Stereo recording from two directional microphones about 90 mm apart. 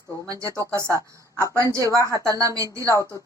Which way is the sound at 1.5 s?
30° right (ahead or behind).